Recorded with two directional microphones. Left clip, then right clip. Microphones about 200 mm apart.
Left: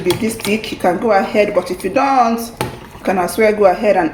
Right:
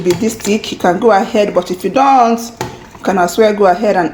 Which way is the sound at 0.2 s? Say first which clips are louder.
Right 3 dB; 30° right (ahead or behind).